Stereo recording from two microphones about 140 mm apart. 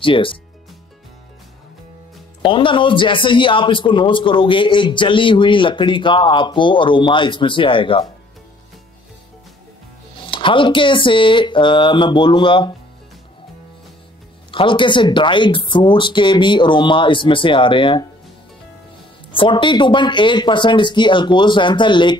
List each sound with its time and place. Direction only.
0.0 s a man's voice: 40° left (ahead or behind)
2.4 s a man's voice: 35° left (ahead or behind)
10.2 s a man's voice: 40° left (ahead or behind)
14.5 s a man's voice: 35° left (ahead or behind)
19.3 s a man's voice: 35° left (ahead or behind)